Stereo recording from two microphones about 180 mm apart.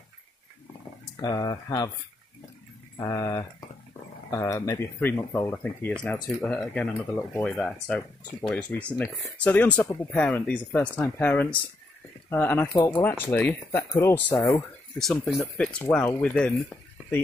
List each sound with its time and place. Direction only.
1.1 s speech: 20° left (ahead or behind)
3.0 s speech: 15° left (ahead or behind)
15.0 s speech: centre (ahead or behind)